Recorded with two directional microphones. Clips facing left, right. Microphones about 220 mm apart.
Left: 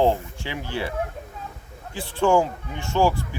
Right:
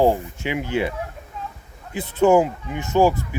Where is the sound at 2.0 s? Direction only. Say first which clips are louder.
Right 4 dB; 20° right (ahead or behind).